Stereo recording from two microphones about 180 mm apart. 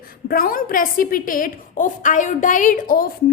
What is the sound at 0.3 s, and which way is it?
A woman's voice, 55° left (ahead or behind).